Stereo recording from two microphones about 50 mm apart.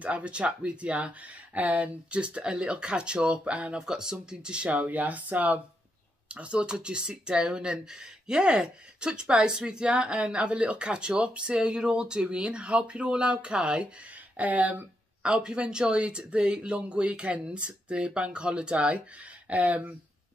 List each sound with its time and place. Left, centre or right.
0.0 s speech: right
3.8 s speech: centre
14.3 s speech: right
15.2 s speech: right